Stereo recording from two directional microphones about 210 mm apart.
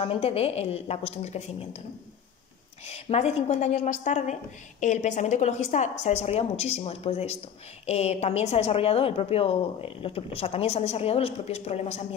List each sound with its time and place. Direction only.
0.0 s a woman's voice: 30° left (ahead or behind)
2.9 s a woman's voice: 30° left (ahead or behind)